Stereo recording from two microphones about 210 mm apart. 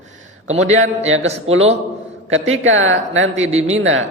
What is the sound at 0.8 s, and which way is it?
Speech, 70° right (ahead or behind).